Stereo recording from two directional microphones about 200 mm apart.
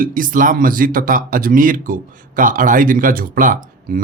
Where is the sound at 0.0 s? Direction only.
45° right (ahead or behind).